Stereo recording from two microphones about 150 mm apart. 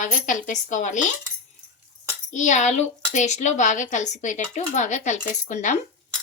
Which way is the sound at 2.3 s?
55° left (ahead or behind).